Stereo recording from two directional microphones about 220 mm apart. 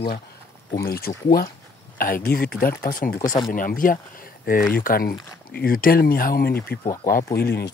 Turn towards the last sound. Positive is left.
turn(degrees=45)  # may be behind; listen again after turning